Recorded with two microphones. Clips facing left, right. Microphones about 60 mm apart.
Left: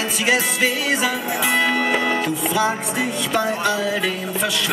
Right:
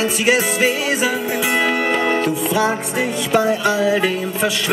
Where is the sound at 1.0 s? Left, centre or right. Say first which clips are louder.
Right 2 dB; centre.